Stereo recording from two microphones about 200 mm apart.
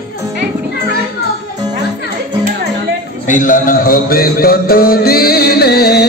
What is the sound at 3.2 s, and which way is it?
Music, 40° left (ahead or behind).